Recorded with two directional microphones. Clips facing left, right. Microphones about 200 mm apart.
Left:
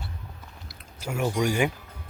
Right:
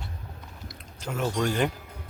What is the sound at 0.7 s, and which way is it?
Speech, 5° left (ahead or behind).